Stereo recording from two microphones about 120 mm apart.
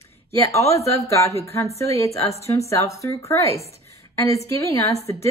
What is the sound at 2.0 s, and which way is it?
Speech, 25° left (ahead or behind).